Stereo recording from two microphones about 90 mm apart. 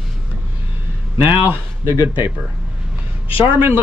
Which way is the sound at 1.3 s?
25° right (ahead or behind).